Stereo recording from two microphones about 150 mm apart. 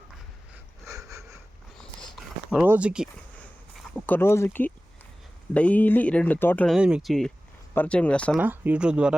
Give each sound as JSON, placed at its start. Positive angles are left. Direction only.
{"t": 0.9, "sound": "sniff", "side_deg": -20}
{"t": 2.5, "sound": "speech", "side_deg": -10}
{"t": 4.0, "sound": "speech", "side_deg": 15}
{"t": 6.7, "sound": "speech", "side_deg": -5}
{"t": 8.4, "sound": "speech", "side_deg": -10}